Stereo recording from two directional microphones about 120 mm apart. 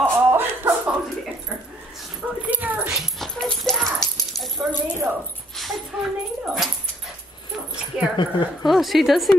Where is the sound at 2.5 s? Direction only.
15° right (ahead or behind).